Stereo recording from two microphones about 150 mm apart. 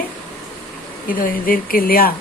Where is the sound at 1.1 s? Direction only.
70° left (ahead or behind).